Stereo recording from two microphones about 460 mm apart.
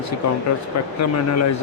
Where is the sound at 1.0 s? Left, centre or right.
Left.